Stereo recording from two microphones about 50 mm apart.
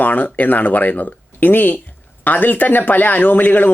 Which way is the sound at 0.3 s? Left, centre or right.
Left.